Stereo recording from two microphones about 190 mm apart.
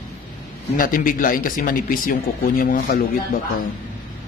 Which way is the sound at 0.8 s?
45° left (ahead or behind).